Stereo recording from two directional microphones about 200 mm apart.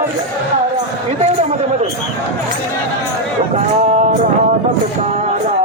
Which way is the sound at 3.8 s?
35° right (ahead or behind).